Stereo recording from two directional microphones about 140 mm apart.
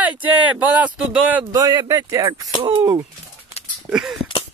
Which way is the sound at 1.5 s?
25° right (ahead or behind).